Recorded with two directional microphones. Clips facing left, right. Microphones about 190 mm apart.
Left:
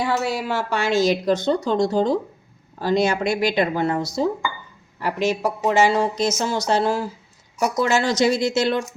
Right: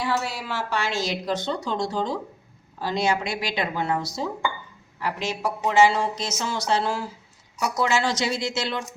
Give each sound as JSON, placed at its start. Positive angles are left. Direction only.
{"t": 0.0, "sound": "a woman's voice", "side_deg": 50}